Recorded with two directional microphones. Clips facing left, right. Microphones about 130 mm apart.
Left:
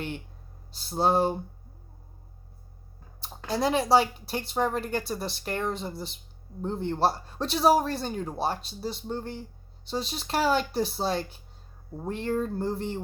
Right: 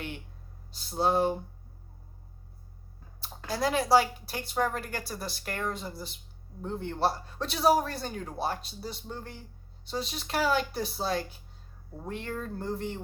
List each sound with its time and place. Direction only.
0.7 s speech: 30° left (ahead or behind)
3.2 s a woman's voice: 20° left (ahead or behind)